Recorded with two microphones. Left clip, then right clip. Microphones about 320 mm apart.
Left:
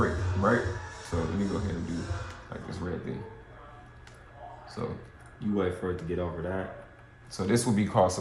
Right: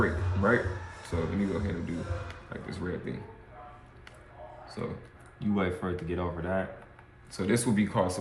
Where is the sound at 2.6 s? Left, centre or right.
Centre.